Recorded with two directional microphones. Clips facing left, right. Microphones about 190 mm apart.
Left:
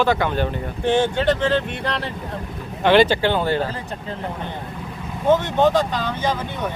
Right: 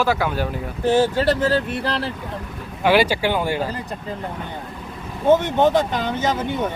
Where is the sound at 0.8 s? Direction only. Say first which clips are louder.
Right 1 dB; 40° right (ahead or behind).